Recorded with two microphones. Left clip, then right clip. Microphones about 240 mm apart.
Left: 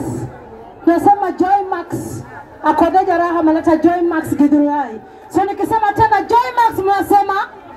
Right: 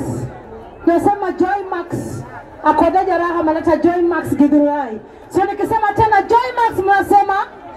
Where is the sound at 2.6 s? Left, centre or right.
Left.